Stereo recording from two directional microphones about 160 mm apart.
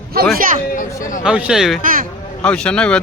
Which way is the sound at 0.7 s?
55° left (ahead or behind).